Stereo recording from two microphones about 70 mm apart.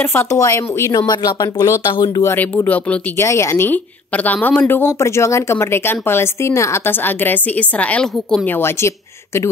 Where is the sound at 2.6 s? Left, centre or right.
Left.